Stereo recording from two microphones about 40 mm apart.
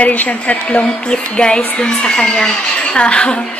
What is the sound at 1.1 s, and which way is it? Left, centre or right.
A woman's voice, left.